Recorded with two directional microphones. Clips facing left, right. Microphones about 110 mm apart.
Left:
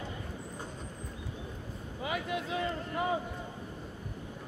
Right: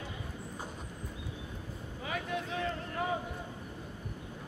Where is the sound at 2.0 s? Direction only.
5° left (ahead or behind).